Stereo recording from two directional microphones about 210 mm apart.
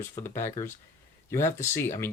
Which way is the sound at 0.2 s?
10° left (ahead or behind).